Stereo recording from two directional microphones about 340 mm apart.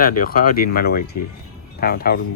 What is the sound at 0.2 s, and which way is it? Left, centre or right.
Speech, left.